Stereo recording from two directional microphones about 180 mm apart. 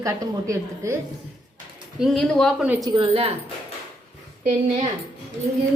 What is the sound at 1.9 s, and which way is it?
Speech, centre (ahead or behind).